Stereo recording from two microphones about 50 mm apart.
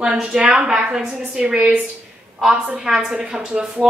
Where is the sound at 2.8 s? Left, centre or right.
Centre.